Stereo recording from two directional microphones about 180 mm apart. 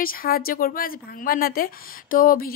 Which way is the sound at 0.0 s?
55° left (ahead or behind).